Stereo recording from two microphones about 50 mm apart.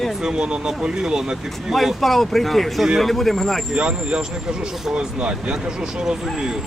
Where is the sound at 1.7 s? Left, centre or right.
Centre.